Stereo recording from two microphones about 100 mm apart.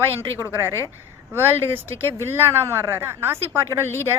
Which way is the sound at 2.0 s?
25° right (ahead or behind).